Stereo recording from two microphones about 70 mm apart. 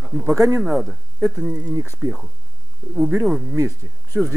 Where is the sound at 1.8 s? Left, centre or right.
Right.